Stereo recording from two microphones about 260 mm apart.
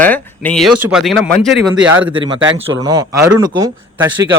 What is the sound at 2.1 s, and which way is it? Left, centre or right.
A man's voice, centre.